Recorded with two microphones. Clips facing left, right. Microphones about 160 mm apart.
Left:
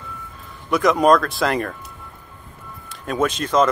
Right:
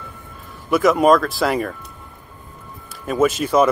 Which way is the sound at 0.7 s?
5° right (ahead or behind).